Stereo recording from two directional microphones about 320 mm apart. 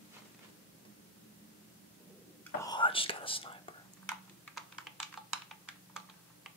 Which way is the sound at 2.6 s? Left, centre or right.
Centre.